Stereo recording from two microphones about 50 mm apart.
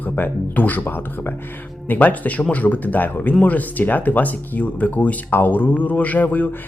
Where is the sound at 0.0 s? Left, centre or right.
Left.